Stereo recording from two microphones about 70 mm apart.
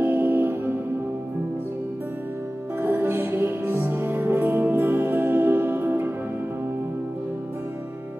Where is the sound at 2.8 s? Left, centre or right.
Right.